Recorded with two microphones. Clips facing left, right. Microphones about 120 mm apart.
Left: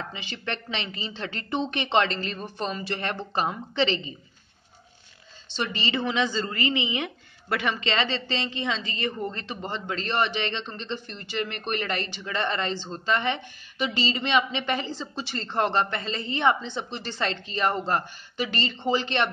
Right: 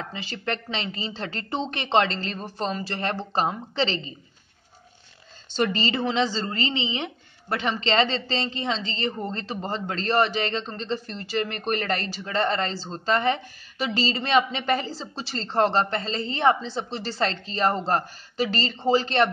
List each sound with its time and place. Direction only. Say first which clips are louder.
0.1 s a woman's voice: right 3 dB; 35° right (ahead or behind)
5.5 s a woman's voice: right 4 dB; 45° right (ahead or behind)